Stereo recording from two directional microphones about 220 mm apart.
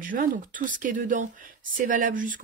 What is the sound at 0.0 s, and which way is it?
Speech, 40° right (ahead or behind).